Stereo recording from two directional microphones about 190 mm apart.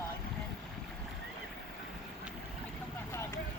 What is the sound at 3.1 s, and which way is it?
Vehicle, 15° left (ahead or behind).